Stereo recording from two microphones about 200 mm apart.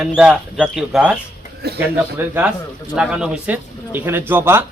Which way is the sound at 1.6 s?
55° right (ahead or behind).